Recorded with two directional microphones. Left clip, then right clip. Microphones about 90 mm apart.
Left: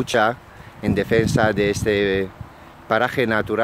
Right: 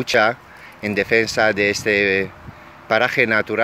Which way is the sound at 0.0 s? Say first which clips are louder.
Right 2 dB; 45° left (ahead or behind).